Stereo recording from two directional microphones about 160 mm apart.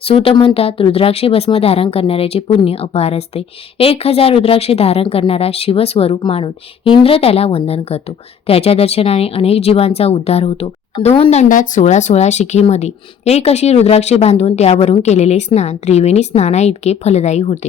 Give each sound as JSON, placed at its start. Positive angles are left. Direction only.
{"t": 0.0, "sound": "speech", "side_deg": 35}